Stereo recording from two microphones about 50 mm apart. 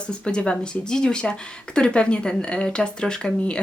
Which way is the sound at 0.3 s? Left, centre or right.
Centre.